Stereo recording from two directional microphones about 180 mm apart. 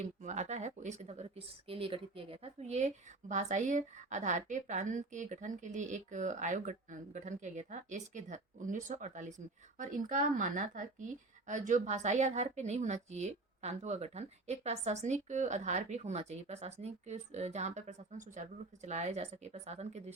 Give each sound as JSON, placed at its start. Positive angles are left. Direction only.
{"t": 0.0, "sound": "speech", "side_deg": -40}